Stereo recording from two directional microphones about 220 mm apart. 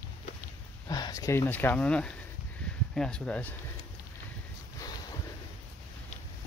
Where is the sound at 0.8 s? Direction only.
15° left (ahead or behind).